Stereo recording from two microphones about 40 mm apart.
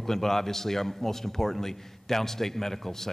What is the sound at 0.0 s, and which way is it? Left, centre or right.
A man's voice, centre.